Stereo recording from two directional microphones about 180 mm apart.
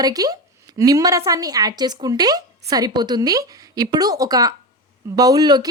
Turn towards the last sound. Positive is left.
turn(degrees=-20)  # may be behind; listen again after turning